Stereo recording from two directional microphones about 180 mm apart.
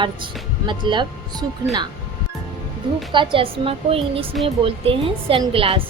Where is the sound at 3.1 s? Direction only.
25° right (ahead or behind).